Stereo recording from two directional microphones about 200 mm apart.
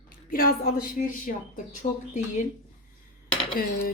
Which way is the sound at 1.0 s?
45° left (ahead or behind).